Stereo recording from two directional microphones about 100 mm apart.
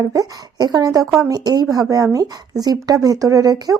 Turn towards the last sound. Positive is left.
turn(degrees=-40)  # may be behind; listen again after turning